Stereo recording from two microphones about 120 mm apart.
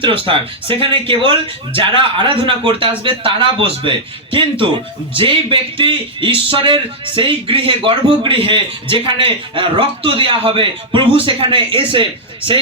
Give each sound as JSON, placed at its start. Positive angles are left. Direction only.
{"t": 0.0, "sound": "speech", "side_deg": -45}